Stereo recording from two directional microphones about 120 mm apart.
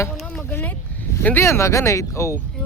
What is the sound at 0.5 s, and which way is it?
Speech, 15° left (ahead or behind).